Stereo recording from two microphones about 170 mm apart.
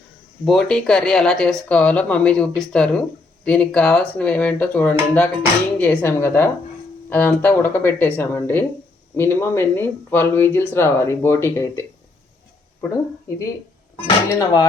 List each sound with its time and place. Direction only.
0.4 s speech: 5° left (ahead or behind)
13.9 s speech: 20° left (ahead or behind)